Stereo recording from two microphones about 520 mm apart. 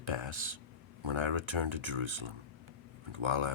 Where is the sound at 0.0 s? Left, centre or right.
Right.